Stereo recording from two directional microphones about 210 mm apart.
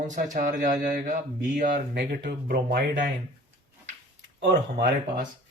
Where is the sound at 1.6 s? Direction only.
50° right (ahead or behind).